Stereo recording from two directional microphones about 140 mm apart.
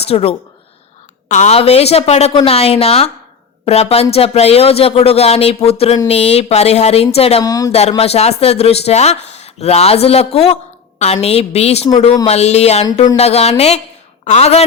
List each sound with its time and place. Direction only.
0.1 s speech: 45° left (ahead or behind)
1.3 s speech: 55° left (ahead or behind)
7.4 s speech: 25° left (ahead or behind)
7.7 s speech: 50° left (ahead or behind)